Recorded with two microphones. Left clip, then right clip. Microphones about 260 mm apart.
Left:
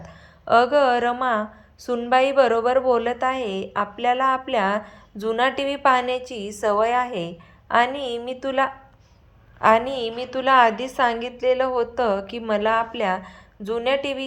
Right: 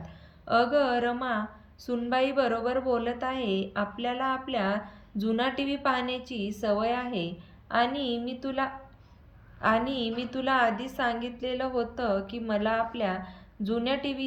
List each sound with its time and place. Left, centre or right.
0.0 s a woman's voice: centre